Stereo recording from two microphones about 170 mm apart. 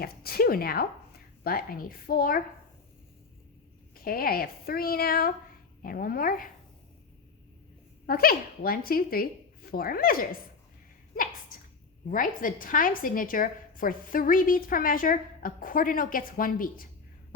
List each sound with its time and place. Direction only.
0.0 s a woman's voice: 60° left (ahead or behind)
4.0 s a woman's voice: 60° left (ahead or behind)
8.0 s speech: 60° left (ahead or behind)
12.1 s a woman's voice: 55° left (ahead or behind)